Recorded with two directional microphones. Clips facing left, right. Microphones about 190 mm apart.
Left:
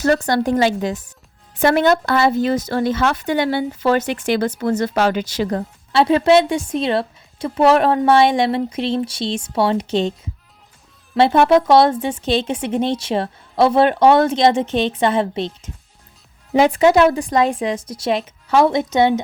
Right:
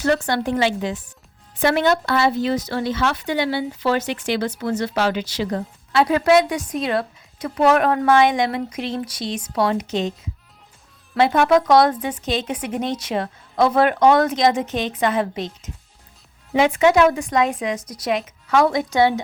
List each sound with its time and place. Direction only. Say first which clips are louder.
0.0 s speech: left 3 dB; 40° left (ahead or behind)
5.9 s speech: left 3 dB; 25° left (ahead or behind)